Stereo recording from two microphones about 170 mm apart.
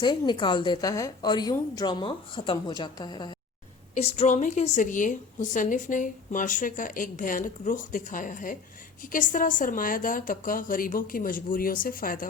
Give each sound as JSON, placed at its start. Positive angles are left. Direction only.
{"t": 0.0, "sound": "a woman's voice", "side_deg": 25}
{"t": 3.9, "sound": "a woman's voice", "side_deg": 40}